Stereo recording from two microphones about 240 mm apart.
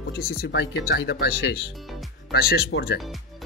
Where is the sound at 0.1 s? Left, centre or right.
Left.